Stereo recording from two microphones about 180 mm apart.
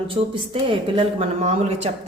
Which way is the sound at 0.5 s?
30° right (ahead or behind).